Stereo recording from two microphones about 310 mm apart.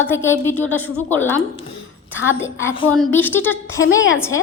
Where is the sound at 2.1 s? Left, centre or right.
Left.